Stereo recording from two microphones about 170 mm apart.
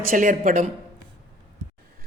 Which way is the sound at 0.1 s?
50° right (ahead or behind).